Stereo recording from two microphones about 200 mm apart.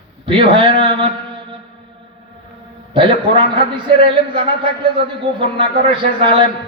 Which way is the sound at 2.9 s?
25° right (ahead or behind).